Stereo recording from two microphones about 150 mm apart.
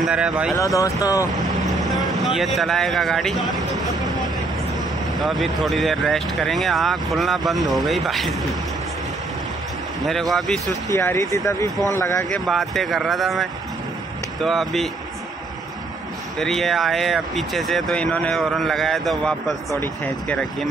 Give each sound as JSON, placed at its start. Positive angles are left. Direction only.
{"t": 0.0, "sound": "speech", "side_deg": -5}
{"t": 0.7, "sound": "speech", "side_deg": 20}
{"t": 2.1, "sound": "speech", "side_deg": 0}
{"t": 10.0, "sound": "speech", "side_deg": 0}
{"t": 10.7, "sound": "speech", "side_deg": 20}
{"t": 12.3, "sound": "speech", "side_deg": 0}
{"t": 16.3, "sound": "speech", "side_deg": 0}